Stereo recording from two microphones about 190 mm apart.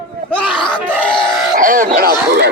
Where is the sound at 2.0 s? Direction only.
55° right (ahead or behind).